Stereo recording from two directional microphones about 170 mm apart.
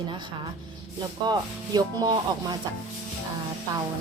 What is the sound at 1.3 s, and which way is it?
Speech, 25° right (ahead or behind).